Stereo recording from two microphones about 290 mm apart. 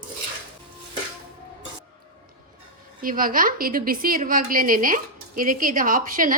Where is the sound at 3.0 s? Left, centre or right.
Right.